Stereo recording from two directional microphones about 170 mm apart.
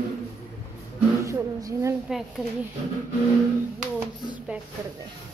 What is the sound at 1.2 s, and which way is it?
Speech, 15° right (ahead or behind).